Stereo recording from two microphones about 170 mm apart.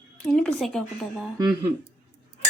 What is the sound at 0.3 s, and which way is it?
Speech, 5° left (ahead or behind).